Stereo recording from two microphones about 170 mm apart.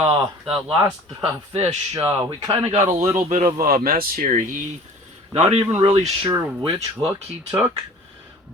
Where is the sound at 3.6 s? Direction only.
60° right (ahead or behind).